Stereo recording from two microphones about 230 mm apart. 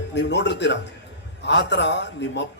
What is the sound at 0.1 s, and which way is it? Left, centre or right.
A man's voice, left.